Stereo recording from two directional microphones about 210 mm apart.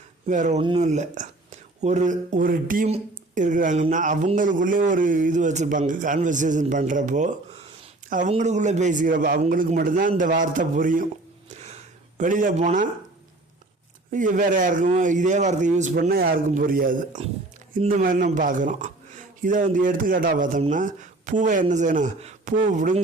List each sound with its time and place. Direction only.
0.3 s speech: 35° right (ahead or behind)
11.5 s a sound: 30° right (ahead or behind)
14.1 s speech: 40° right (ahead or behind)